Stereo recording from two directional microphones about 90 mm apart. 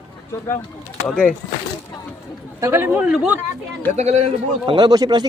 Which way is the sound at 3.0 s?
10° right (ahead or behind).